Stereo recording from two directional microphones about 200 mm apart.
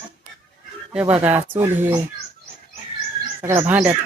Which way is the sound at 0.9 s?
5° right (ahead or behind).